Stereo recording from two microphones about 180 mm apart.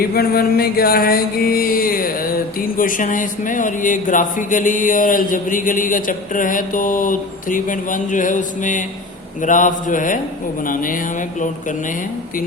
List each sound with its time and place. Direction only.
0.1 s mantra: 60° left (ahead or behind)